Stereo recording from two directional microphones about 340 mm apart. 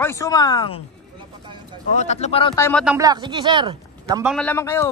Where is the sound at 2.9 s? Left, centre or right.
Centre.